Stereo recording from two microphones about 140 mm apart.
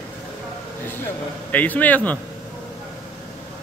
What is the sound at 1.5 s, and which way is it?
Speech, 10° left (ahead or behind).